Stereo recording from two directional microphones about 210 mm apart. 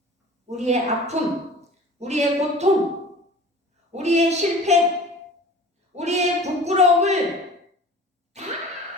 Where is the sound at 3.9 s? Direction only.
30° right (ahead or behind).